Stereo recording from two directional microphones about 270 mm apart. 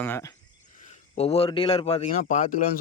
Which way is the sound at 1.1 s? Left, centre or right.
Left.